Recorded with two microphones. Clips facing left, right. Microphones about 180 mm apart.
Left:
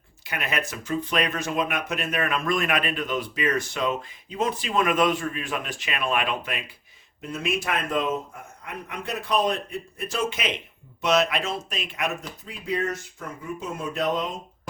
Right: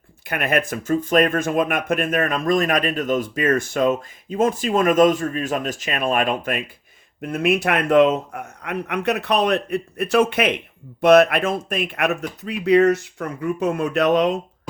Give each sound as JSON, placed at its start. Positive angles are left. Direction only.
{"t": 0.3, "sound": "speech", "side_deg": -50}
{"t": 7.2, "sound": "a man's voice", "side_deg": -60}